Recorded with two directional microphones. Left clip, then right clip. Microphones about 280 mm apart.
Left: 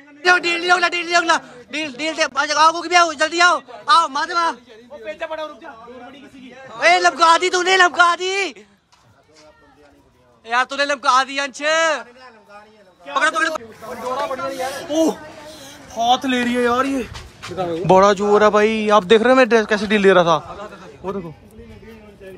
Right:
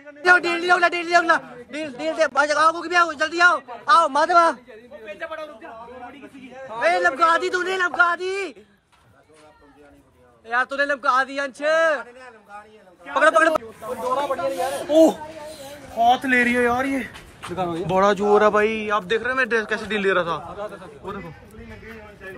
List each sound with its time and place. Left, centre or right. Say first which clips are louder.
0.2 s a man's voice: left 1 dB; centre
5.2 s a man's voice: left 5 dB; left
6.8 s a man's voice: left 5 dB; centre
10.4 s a man's voice: left 3 dB; centre
13.1 s a man's voice: right 2 dB; centre
14.9 s a man's voice: right 4 dB; centre
16.0 s a man's voice: even; centre
17.8 s a man's voice: left 6 dB; centre
21.1 s a sound: left 7 dB; centre